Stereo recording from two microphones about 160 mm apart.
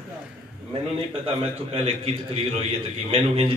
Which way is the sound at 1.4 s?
40° right (ahead or behind).